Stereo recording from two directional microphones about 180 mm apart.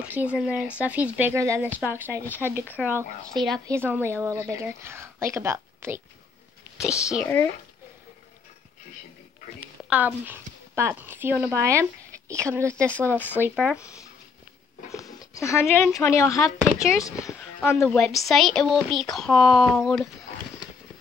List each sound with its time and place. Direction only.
0.0 s speech: 5° right (ahead or behind)
2.2 s speech: 10° left (ahead or behind)
2.8 s speech: centre (ahead or behind)
3.6 s speech: 15° right (ahead or behind)
6.8 s speech: centre (ahead or behind)
7.2 s speech: 15° left (ahead or behind)
9.8 s a woman's voice: 10° right (ahead or behind)
13.2 s speech: 10° left (ahead or behind)
14.9 s speech: 20° left (ahead or behind)